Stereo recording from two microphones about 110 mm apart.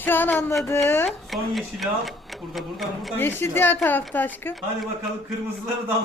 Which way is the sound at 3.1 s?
20° left (ahead or behind).